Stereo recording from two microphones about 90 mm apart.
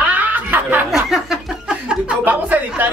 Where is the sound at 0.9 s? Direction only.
5° right (ahead or behind).